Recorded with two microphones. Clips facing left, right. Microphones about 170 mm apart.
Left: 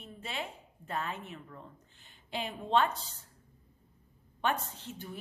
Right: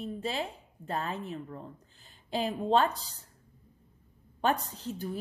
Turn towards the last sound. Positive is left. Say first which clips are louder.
# right 7 dB
turn(degrees=-40)  # may be behind; listen again after turning